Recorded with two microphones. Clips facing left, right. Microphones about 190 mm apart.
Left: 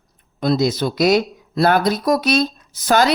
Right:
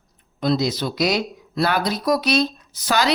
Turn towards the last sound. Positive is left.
turn(degrees=50)  # may be behind; listen again after turning